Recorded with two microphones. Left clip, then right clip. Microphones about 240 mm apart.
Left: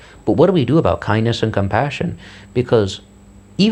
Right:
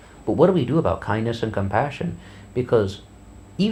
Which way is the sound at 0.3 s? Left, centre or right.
Left.